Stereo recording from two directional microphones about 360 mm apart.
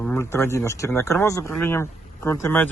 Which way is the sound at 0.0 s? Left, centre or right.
Centre.